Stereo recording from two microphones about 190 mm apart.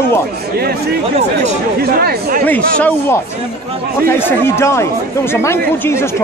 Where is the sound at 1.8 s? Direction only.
55° right (ahead or behind).